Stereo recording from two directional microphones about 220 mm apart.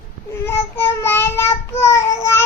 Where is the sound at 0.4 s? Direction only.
10° left (ahead or behind).